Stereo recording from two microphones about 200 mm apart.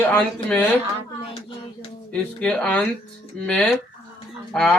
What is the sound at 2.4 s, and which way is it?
Speech, 5° left (ahead or behind).